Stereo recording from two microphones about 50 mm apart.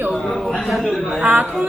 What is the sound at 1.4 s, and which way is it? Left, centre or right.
Music, centre.